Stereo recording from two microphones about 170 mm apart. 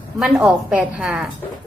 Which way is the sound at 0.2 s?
5° right (ahead or behind).